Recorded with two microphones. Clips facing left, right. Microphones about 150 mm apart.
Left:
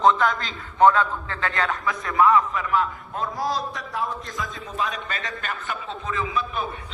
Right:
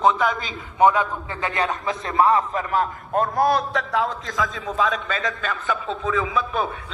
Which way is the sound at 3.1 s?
55° right (ahead or behind).